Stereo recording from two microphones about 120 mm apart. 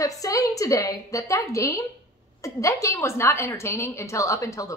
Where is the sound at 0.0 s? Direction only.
30° left (ahead or behind).